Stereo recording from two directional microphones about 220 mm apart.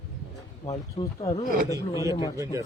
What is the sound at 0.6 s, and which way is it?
Speech, 30° left (ahead or behind).